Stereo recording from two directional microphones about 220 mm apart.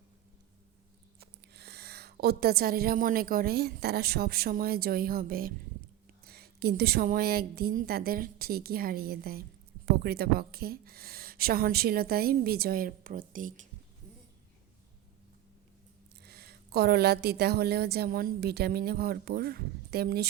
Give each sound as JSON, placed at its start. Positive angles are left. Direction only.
{"t": 1.5, "sound": "a woman's voice", "side_deg": -45}
{"t": 16.2, "sound": "a woman's voice", "side_deg": -45}